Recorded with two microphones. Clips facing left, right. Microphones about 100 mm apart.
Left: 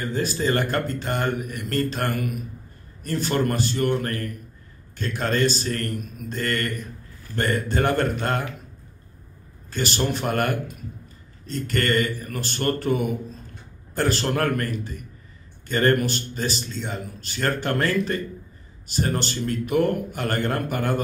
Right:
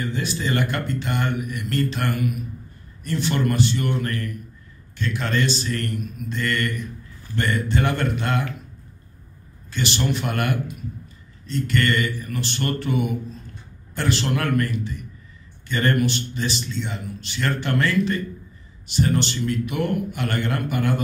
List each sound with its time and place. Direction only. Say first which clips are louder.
0.0 s a man's voice: left 2 dB; 40° left (ahead or behind)
9.7 s a man's voice: even; 40° left (ahead or behind)